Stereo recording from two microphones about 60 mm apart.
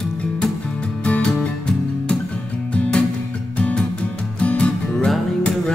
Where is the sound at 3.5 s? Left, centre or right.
Centre.